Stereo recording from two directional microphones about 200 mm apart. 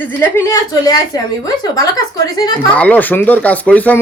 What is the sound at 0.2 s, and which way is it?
Speech, 10° left (ahead or behind).